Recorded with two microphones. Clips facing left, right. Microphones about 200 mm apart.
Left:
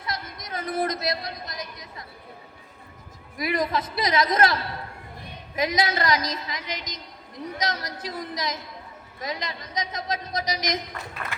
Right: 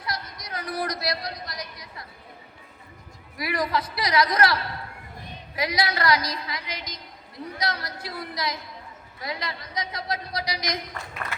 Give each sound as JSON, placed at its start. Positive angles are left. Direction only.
{"t": 0.0, "sound": "a sound", "side_deg": 25}
{"t": 3.3, "sound": "a woman's voice", "side_deg": 20}
{"t": 5.5, "sound": "a woman's voice", "side_deg": 20}